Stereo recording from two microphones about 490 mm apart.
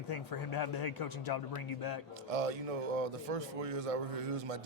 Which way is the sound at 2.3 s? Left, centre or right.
Right.